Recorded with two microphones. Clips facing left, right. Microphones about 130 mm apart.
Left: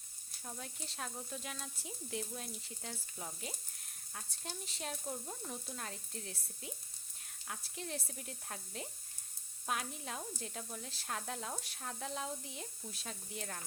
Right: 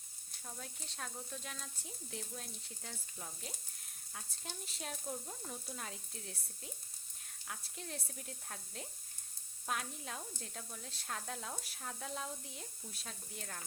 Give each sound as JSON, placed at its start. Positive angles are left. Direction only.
{"t": 0.4, "sound": "frying", "side_deg": 0}
{"t": 5.5, "sound": "frying", "side_deg": 0}